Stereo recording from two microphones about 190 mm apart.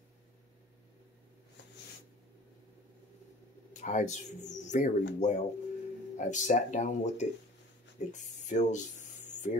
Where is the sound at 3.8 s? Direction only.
40° left (ahead or behind).